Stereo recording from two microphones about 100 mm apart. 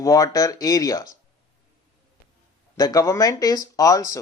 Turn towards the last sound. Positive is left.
turn(degrees=35)  # may be behind; listen again after turning